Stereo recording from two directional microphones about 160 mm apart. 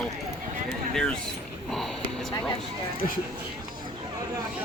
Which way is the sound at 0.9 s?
5° left (ahead or behind).